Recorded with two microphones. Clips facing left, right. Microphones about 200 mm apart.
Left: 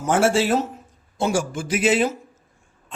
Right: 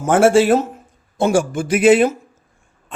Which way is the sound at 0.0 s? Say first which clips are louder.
Right 6 dB; 55° right (ahead or behind).